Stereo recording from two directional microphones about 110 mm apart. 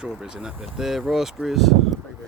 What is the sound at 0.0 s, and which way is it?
Speech, 5° right (ahead or behind).